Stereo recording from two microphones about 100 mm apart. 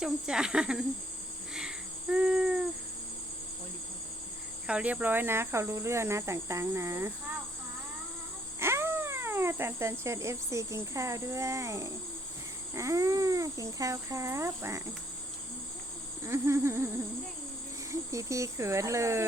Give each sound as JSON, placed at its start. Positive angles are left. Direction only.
{"t": 0.0, "sound": "speech", "side_deg": -5}
{"t": 1.5, "sound": "a sound", "side_deg": -10}
{"t": 4.6, "sound": "speech", "side_deg": -10}
{"t": 8.5, "sound": "speech", "side_deg": -25}
{"t": 16.2, "sound": "speech", "side_deg": -30}
{"t": 17.9, "sound": "speech", "side_deg": -30}